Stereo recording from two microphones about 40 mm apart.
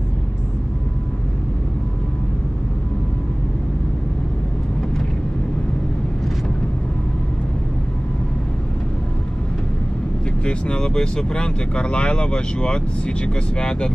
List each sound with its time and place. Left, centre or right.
10.4 s speech: left